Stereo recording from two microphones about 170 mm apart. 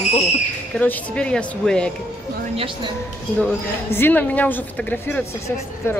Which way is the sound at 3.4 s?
10° left (ahead or behind).